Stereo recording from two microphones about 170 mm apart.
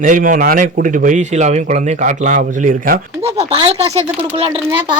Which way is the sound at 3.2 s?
35° right (ahead or behind).